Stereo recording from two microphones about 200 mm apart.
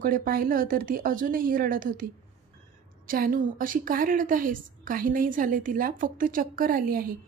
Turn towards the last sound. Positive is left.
turn(degrees=-45)  # may be behind; listen again after turning